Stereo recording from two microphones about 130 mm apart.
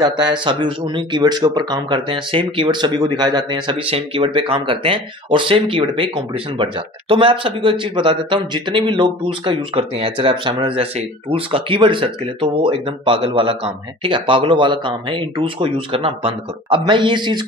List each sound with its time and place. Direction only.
0.0 s speech: 35° right (ahead or behind)
3.9 s speech: 45° right (ahead or behind)